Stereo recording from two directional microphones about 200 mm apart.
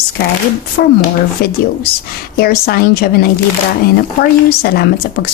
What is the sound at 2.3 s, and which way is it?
Speech, 50° left (ahead or behind).